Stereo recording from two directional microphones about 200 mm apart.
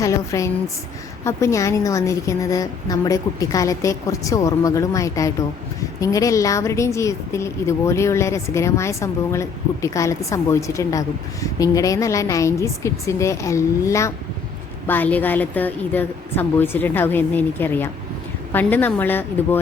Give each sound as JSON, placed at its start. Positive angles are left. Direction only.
{"t": 0.0, "sound": "a woman's voice", "side_deg": 15}